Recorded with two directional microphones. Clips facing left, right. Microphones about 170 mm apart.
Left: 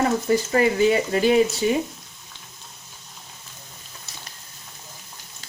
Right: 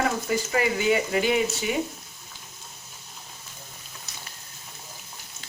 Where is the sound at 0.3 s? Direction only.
35° left (ahead or behind).